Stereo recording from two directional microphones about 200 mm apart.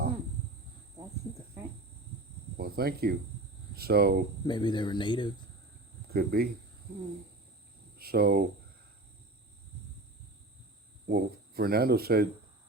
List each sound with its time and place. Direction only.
2.6 s speech: 50° right (ahead or behind)
4.4 s speech: 20° left (ahead or behind)
6.1 s speech: 50° right (ahead or behind)
7.9 s speech: 50° right (ahead or behind)
11.1 s speech: 50° right (ahead or behind)